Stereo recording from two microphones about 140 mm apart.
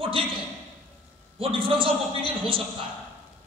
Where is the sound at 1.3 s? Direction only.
40° right (ahead or behind).